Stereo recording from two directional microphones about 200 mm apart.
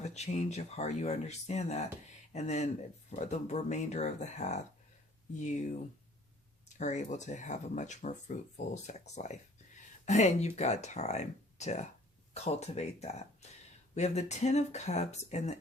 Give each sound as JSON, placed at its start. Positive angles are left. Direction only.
{"t": 0.0, "sound": "speech", "side_deg": 35}
{"t": 6.7, "sound": "speech", "side_deg": 35}